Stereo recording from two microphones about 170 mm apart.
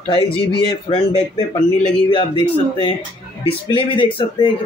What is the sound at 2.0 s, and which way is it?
A man's voice, 30° left (ahead or behind).